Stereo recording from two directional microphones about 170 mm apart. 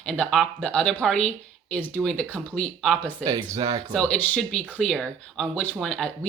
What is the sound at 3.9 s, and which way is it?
Speech, 10° left (ahead or behind).